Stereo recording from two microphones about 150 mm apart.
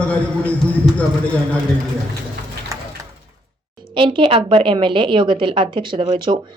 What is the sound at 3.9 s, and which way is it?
A woman's voice, 35° right (ahead or behind).